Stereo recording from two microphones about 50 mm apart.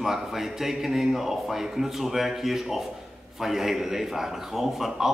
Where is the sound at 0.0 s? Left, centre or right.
Centre.